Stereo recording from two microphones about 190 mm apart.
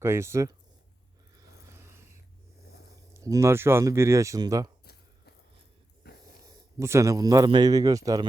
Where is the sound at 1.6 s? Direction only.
15° right (ahead or behind).